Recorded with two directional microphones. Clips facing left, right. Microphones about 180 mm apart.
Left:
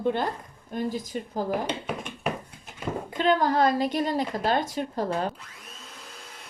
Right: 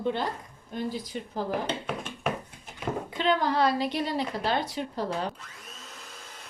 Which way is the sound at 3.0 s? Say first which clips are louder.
Left 4 dB; 45° left (ahead or behind).